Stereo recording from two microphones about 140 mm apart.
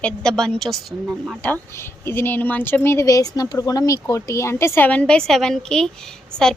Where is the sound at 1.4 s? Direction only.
15° left (ahead or behind).